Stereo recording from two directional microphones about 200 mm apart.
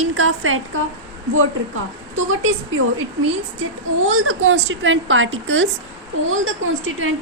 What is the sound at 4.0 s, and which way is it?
A woman's voice, 90° right.